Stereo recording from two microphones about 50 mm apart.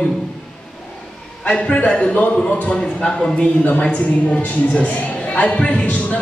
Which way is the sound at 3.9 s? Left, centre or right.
Left.